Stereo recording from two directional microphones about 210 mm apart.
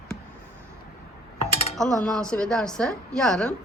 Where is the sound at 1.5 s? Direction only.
30° left (ahead or behind).